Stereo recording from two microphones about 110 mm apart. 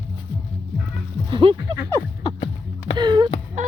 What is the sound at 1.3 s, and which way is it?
Speech, 50° right (ahead or behind).